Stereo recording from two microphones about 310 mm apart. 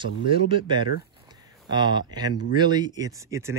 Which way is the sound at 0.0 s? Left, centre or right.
Centre.